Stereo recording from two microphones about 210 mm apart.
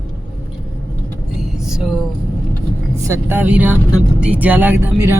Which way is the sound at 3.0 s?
10° right (ahead or behind).